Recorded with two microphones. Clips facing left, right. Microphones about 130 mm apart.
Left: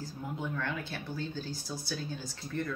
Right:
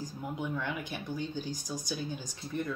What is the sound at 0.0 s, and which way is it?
Speech, 15° right (ahead or behind).